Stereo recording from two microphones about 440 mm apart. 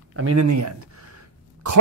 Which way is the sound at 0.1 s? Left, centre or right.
Right.